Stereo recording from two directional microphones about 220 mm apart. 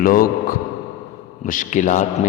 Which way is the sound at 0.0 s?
40° left (ahead or behind).